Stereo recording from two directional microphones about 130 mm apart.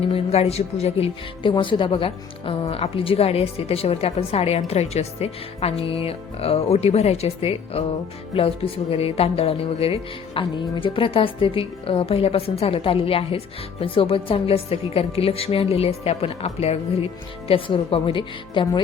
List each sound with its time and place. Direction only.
0.1 s a woman's voice: 50° left (ahead or behind); by 18.8 s 35° left (ahead or behind)